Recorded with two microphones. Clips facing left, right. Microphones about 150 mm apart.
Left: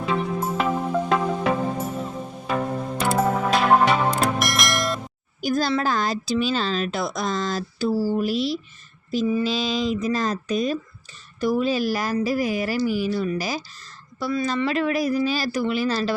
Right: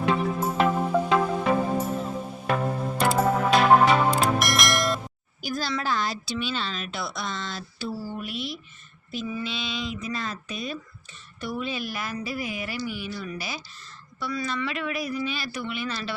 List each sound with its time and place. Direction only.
0.1 s music: centre (ahead or behind)
5.4 s a woman's voice: 45° left (ahead or behind)